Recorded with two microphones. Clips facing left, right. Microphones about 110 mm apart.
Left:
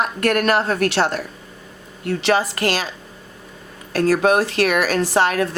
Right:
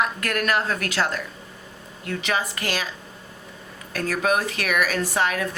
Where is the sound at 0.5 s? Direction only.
30° left (ahead or behind).